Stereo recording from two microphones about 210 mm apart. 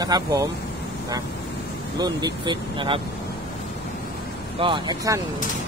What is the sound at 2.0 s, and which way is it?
Speech, 20° right (ahead or behind).